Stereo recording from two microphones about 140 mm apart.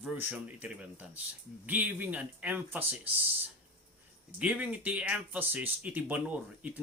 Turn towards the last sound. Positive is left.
turn(degrees=-10)  # may be behind; listen again after turning